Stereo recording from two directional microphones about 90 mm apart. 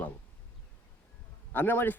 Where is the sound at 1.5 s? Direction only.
25° left (ahead or behind).